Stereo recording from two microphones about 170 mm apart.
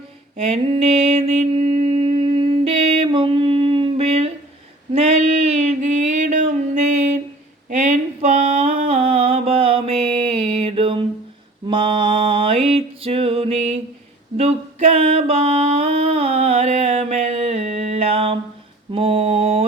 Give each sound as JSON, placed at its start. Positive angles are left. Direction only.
{"t": 0.5, "sound": "mantra", "side_deg": -40}
{"t": 5.5, "sound": "a sound", "side_deg": -45}
{"t": 11.6, "sound": "music", "side_deg": -30}
{"t": 14.9, "sound": "music", "side_deg": -35}
{"t": 18.9, "sound": "mantra", "side_deg": -35}